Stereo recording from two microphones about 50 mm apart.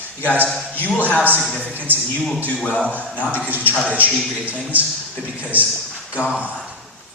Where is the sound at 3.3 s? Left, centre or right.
Right.